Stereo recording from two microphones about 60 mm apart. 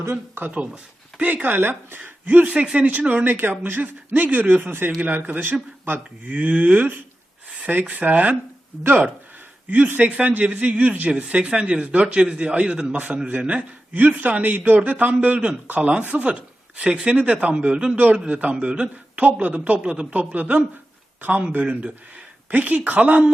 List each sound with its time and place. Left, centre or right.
0.5 s a man's voice: right
9.6 s a man's voice: right